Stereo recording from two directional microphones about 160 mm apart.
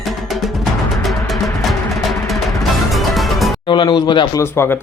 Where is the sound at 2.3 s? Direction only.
Centre (ahead or behind).